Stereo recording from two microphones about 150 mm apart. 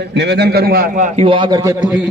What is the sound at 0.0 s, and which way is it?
A man's voice, 90° right.